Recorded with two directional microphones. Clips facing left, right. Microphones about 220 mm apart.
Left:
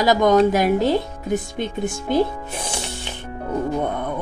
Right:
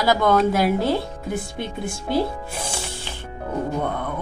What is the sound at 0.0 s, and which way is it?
A woman's voice, 20° left (ahead or behind).